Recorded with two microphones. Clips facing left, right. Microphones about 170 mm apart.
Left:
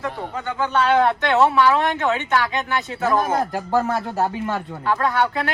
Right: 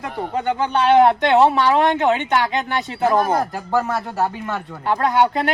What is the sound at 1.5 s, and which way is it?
Speech, 35° right (ahead or behind).